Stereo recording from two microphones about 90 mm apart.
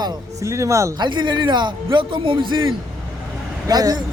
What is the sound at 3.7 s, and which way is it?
Speech, 45° right (ahead or behind).